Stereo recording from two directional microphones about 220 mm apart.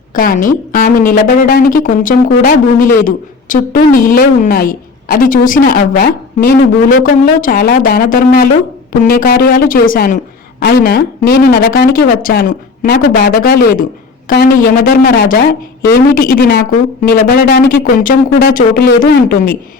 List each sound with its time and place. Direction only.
0.1 s a woman's voice: 40° left (ahead or behind)